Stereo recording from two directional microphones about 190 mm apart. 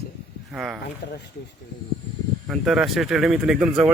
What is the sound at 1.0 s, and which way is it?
Speech, 60° left (ahead or behind).